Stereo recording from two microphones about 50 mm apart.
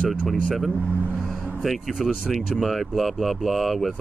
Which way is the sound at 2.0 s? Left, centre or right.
Centre.